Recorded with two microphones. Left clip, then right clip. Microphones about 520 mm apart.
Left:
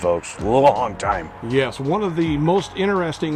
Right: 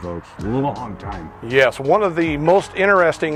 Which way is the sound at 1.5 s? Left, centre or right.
Right.